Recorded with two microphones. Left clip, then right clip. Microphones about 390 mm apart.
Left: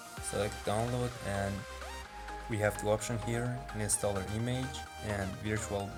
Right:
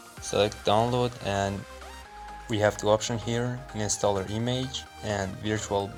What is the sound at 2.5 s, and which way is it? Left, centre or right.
Speech, left.